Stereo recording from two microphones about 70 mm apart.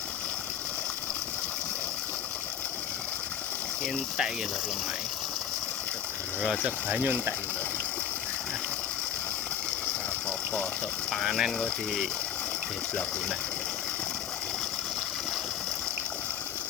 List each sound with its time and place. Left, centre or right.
6.4 s speech: centre
6.8 s speech: right
10.2 s water: centre
11.1 s speech: centre